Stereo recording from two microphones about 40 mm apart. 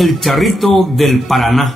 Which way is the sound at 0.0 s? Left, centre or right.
Centre.